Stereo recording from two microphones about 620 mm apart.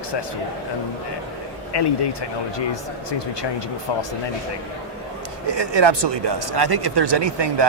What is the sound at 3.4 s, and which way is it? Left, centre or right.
Speech, left.